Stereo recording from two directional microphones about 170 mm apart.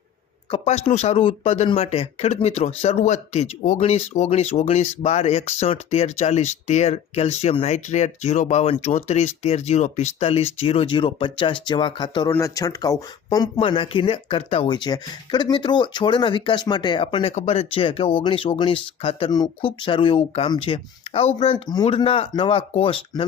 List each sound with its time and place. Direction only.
0.5 s speech: 40° left (ahead or behind)